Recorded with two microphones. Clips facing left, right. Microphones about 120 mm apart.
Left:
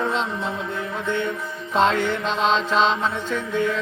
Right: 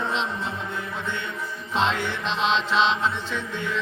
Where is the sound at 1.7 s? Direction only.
45° left (ahead or behind).